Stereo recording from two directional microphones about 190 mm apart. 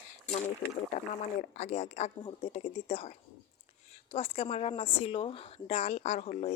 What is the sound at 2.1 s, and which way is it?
Speech, 20° left (ahead or behind).